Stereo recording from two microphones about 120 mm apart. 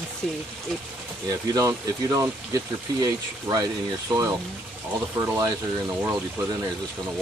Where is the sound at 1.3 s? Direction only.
30° right (ahead or behind).